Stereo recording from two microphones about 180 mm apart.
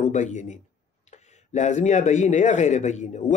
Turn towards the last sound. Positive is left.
turn(degrees=40)  # may be behind; listen again after turning